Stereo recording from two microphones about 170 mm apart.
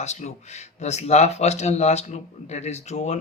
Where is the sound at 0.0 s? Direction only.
40° left (ahead or behind).